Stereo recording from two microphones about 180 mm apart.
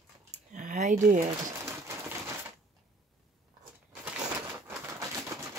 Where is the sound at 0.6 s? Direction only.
45° right (ahead or behind).